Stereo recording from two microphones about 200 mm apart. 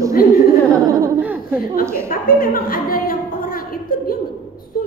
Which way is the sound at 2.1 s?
45° left (ahead or behind).